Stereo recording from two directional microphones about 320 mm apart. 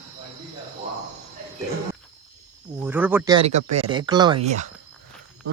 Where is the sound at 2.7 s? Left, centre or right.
Centre.